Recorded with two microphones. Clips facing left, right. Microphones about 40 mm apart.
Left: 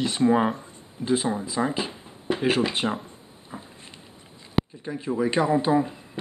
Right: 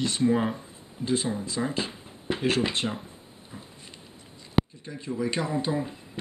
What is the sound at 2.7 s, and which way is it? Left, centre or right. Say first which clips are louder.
Speech: left 3 dB; centre.